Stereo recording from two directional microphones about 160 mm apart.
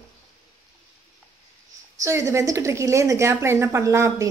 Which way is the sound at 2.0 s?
20° right (ahead or behind).